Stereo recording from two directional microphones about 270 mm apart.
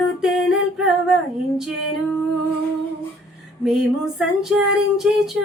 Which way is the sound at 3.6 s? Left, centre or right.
Centre.